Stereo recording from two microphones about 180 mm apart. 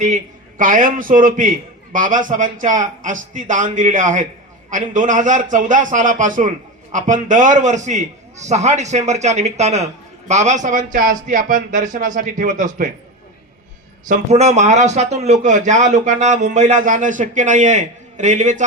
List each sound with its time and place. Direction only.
0.6 s speech: 50° right (ahead or behind)
14.1 s speech: 40° right (ahead or behind)